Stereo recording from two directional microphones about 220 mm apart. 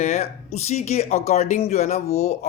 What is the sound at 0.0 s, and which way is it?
A man's voice, 30° left (ahead or behind).